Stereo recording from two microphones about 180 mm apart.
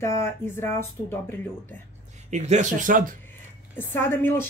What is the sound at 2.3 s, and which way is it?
Speech, 40° right (ahead or behind).